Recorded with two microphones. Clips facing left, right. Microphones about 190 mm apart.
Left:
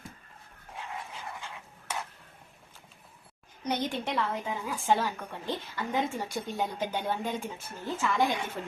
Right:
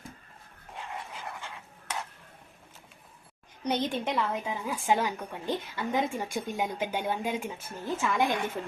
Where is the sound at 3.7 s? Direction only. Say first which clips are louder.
Right 2 dB; 20° right (ahead or behind).